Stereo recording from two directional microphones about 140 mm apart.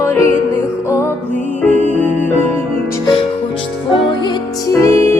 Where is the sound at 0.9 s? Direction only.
20° left (ahead or behind).